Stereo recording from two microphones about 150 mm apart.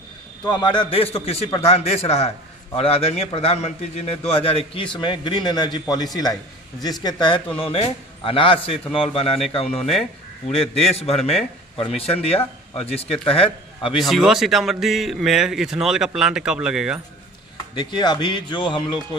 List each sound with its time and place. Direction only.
0.5 s a man's voice: 30° left (ahead or behind)
13.9 s speech: centre (ahead or behind)
17.7 s a man's voice: 30° left (ahead or behind)